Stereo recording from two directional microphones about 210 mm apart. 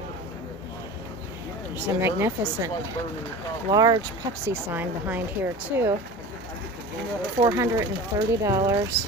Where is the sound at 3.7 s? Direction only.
20° right (ahead or behind).